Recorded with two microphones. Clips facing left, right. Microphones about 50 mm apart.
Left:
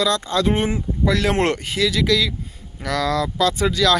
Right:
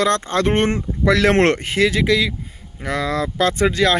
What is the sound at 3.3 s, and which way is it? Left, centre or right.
Speech, right.